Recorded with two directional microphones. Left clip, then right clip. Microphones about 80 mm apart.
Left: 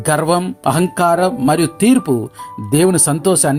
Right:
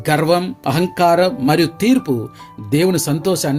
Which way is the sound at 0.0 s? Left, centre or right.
Left.